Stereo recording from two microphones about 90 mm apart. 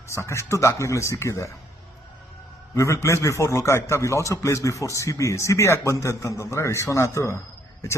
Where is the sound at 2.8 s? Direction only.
35° left (ahead or behind).